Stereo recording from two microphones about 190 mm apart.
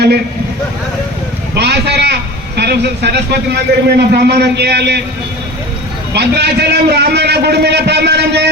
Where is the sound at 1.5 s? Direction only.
60° right (ahead or behind).